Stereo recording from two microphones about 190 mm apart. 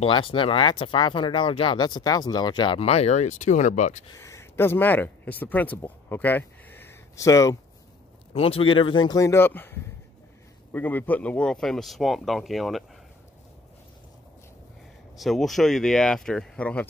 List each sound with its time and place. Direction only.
0.0 s speech: 30° left (ahead or behind)
4.2 s speech: 15° left (ahead or behind)
8.3 s speech: 30° left (ahead or behind); by 12.8 s centre (ahead or behind)
15.1 s speech: centre (ahead or behind)